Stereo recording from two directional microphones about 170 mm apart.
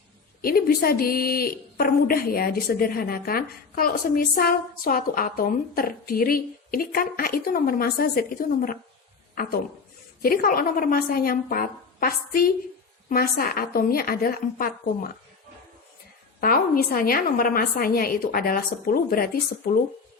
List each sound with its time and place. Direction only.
0.4 s a woman's voice: 65° left (ahead or behind)
9.3 s a woman's voice: 60° left (ahead or behind)
16.4 s a woman's voice: 60° left (ahead or behind)